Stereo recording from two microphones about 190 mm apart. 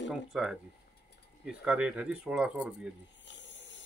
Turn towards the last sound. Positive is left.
turn(degrees=75)  # may be behind; listen again after turning